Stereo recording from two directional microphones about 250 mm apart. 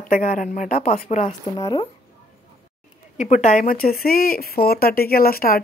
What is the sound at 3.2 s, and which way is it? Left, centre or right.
Speech, left.